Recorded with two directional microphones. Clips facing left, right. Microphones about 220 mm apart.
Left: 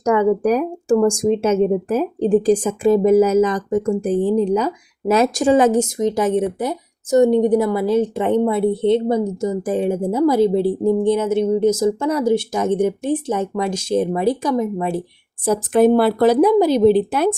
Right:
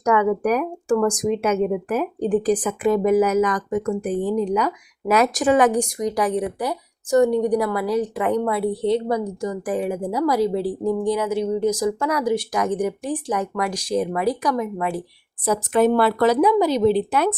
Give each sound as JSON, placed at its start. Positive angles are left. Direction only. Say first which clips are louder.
{"t": 0.0, "sound": "a woman's voice", "louder": "left 3 dB", "side_deg": 30}
{"t": 16.3, "sound": "speech", "louder": "left 4 dB", "side_deg": 50}